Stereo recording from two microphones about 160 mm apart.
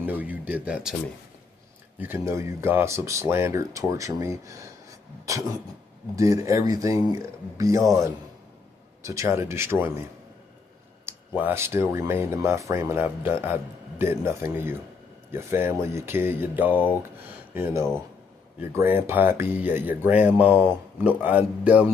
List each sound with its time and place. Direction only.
0.0 s speech: 10° right (ahead or behind)
2.0 s speech: 15° right (ahead or behind)
11.1 s speech: 15° right (ahead or behind)
18.6 s speech: 15° right (ahead or behind)